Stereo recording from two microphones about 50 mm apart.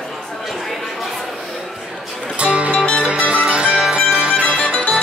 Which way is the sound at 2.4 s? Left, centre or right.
Right.